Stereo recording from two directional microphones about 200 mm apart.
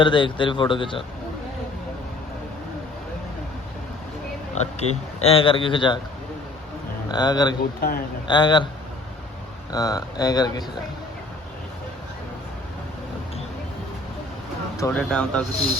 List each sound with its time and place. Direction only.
0.0 s speech: 25° left (ahead or behind)
4.5 s speech: 30° left (ahead or behind)
7.1 s speech: 20° left (ahead or behind)
7.8 s a man's voice: 45° left (ahead or behind)
8.3 s speech: 25° left (ahead or behind)
9.7 s speech: 20° left (ahead or behind)
14.8 s speech: 10° left (ahead or behind)